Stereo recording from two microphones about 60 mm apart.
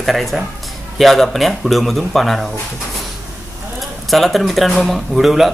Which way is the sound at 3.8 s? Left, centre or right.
Centre.